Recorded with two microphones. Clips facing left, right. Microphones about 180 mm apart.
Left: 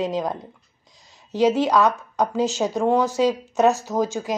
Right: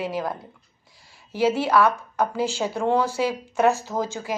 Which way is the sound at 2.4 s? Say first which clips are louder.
Left 3 dB; 15° left (ahead or behind).